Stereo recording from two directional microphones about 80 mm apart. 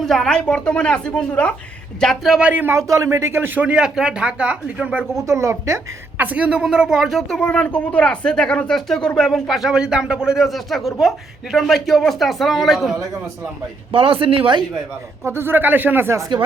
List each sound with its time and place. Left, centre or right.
0.0 s a woman's voice: centre
2.0 s speech: centre
2.4 s speech: right
2.7 s speech: right; by 5.0 s centre
5.1 s speech: right
6.1 s speech: centre
14.2 s speech: right
15.3 s speech: right